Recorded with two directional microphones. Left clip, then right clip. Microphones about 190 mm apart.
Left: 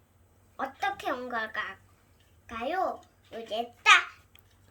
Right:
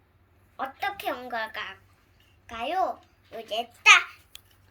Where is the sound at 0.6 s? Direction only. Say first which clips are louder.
Right 1 dB; 15° left (ahead or behind).